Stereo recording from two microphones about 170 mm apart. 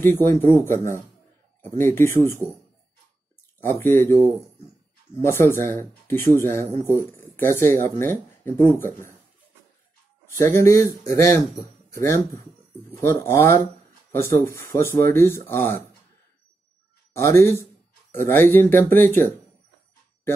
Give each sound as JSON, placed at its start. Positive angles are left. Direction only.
{"t": 0.0, "sound": "speech", "side_deg": 15}
{"t": 3.6, "sound": "speech", "side_deg": 15}
{"t": 10.2, "sound": "music", "side_deg": 15}
{"t": 10.6, "sound": "speech", "side_deg": 20}
{"t": 13.0, "sound": "speech", "side_deg": 15}
{"t": 17.1, "sound": "speech", "side_deg": 15}